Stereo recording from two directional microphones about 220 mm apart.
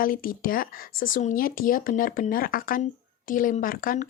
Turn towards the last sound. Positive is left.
turn(degrees=40)  # may be behind; listen again after turning